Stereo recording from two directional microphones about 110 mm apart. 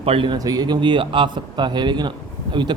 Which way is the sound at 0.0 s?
55° right (ahead or behind).